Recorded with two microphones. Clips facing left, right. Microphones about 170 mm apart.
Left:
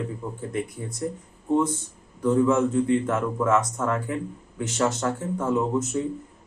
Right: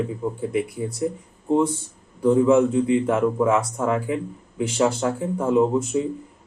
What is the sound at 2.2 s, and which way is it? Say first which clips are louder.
A man's voice: right 4 dB; 20° right (ahead or behind).